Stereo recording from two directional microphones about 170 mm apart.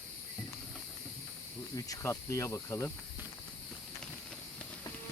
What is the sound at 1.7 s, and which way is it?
Speech, 20° left (ahead or behind).